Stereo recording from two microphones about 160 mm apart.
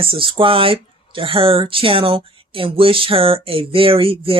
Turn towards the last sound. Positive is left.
turn(degrees=-35)  # may be behind; listen again after turning